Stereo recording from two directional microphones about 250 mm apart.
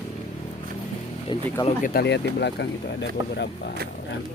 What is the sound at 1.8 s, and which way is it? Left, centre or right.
Speech, left.